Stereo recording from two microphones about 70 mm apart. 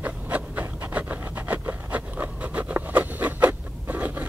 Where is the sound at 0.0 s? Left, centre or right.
Right.